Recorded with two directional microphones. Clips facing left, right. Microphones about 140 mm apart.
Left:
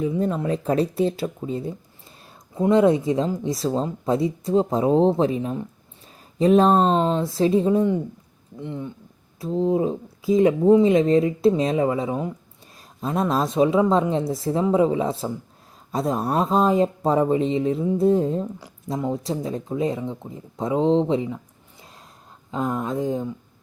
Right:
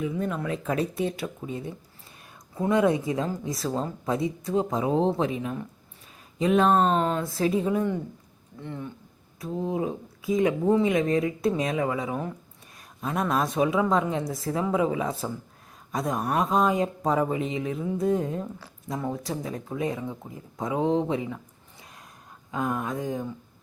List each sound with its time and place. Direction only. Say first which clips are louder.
0.0 s speech: left 6 dB; 30° left (ahead or behind)
22.5 s speech: left 4 dB; 25° left (ahead or behind)